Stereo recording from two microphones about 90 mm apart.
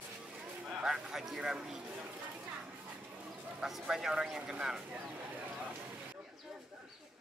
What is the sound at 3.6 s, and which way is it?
Speech, 5° right (ahead or behind).